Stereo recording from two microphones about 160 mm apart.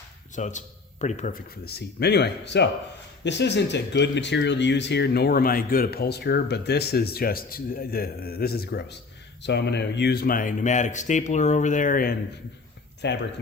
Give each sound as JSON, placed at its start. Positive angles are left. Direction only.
{"t": 0.3, "sound": "a man's voice", "side_deg": 50}
{"t": 1.6, "sound": "speech", "side_deg": 85}
{"t": 13.0, "sound": "speech", "side_deg": 90}